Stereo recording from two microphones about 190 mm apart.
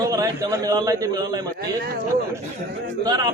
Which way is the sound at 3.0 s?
20° right (ahead or behind).